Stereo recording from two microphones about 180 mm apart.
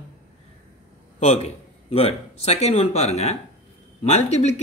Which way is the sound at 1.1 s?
35° left (ahead or behind).